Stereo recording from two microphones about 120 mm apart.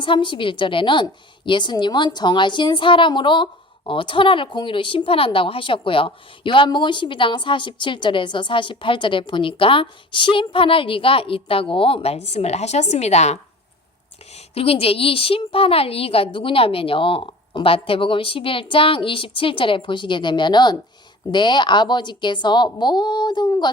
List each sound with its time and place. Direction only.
0.0 s a woman's voice: 45° left (ahead or behind); by 13.4 s 65° left (ahead or behind)
14.3 s a woman's voice: 55° left (ahead or behind); by 23.6 s 35° left (ahead or behind)